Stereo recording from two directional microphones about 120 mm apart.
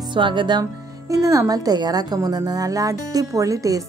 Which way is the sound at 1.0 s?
25° right (ahead or behind).